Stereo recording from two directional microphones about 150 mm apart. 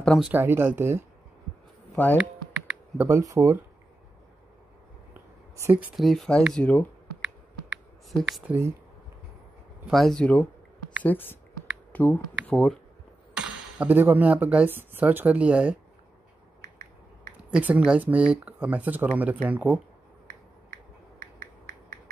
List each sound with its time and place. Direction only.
0.0 s speech: 5° left (ahead or behind)
0.3 s speech: 15° right (ahead or behind)
2.1 s computer keyboard: 5° right (ahead or behind)
3.1 s speech: 20° right (ahead or behind)
5.1 s a sound: 15° right (ahead or behind)
5.9 s speech: centre (ahead or behind)
7.2 s a sound: 5° right (ahead or behind)
9.8 s speech: centre (ahead or behind)
13.3 s speech: 5° right (ahead or behind)
16.6 s a sound: 70° right (ahead or behind)
17.6 s speech: 10° right (ahead or behind)
21.2 s a sound: 70° right (ahead or behind)